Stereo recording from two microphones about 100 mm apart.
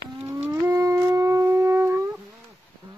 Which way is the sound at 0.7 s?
35° right (ahead or behind).